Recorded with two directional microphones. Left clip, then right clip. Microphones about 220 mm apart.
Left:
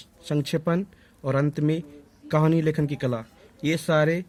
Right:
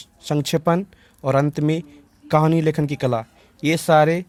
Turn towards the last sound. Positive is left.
turn(degrees=-35)  # may be behind; listen again after turning